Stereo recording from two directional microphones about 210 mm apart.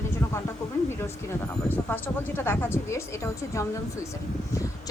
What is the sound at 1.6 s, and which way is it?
A woman's voice, 10° left (ahead or behind).